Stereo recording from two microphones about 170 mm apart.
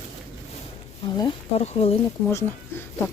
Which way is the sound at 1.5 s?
35° left (ahead or behind).